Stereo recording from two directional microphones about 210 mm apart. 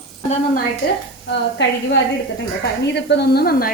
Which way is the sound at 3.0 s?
55° left (ahead or behind).